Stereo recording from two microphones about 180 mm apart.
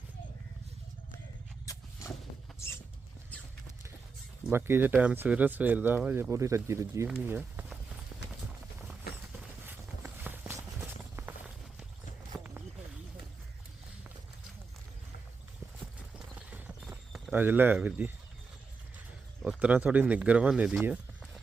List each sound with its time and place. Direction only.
1.6 s a sound: 15° left (ahead or behind)
4.4 s speech: 15° right (ahead or behind)
9.1 s clip-clop: 5° right (ahead or behind)
12.3 s a sound: centre (ahead or behind)
15.8 s clip-clop: 5° right (ahead or behind)
19.4 s speech: 5° right (ahead or behind)